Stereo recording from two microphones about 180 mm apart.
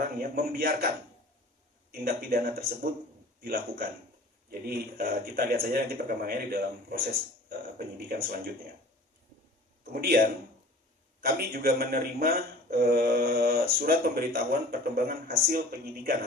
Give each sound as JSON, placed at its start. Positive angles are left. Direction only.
{"t": 0.0, "sound": "speech", "side_deg": -55}
{"t": 1.9, "sound": "speech", "side_deg": -55}
{"t": 9.9, "sound": "speech", "side_deg": -55}